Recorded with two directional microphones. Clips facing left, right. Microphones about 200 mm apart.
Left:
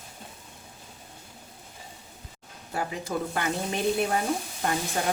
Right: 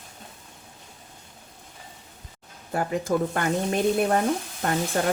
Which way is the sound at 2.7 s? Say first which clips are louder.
Right 6 dB; 50° right (ahead or behind).